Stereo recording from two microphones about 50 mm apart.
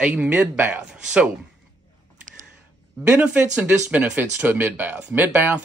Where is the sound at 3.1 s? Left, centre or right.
Right.